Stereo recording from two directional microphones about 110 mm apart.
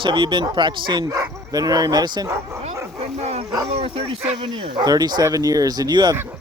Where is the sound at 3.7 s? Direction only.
65° right (ahead or behind).